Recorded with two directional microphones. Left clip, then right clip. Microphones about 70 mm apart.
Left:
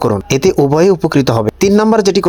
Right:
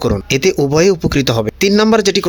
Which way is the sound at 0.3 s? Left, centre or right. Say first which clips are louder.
Left 2 dB; left.